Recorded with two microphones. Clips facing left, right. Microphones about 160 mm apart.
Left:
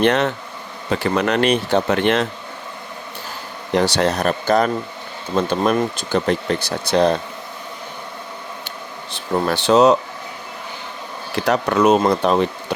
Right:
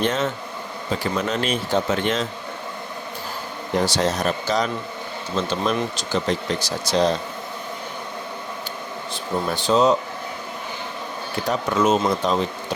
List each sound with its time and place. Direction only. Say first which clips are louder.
0.0 s speech: left 5 dB; 70° left (ahead or behind)
3.8 s speech: left 4 dB; 65° left (ahead or behind)
9.1 s speech: left 5 dB; 70° left (ahead or behind)
11.4 s speech: left 5 dB; 70° left (ahead or behind)